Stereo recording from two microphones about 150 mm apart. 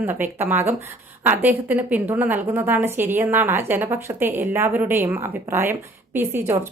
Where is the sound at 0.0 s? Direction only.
15° right (ahead or behind).